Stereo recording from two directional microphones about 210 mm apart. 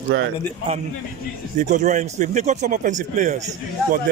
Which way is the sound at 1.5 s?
35° right (ahead or behind).